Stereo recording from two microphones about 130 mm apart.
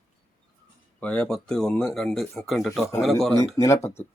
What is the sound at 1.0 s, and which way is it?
A man's voice, 10° left (ahead or behind).